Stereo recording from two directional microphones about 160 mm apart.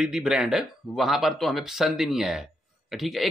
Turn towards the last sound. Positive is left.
turn(degrees=0)  # may be behind; listen again after turning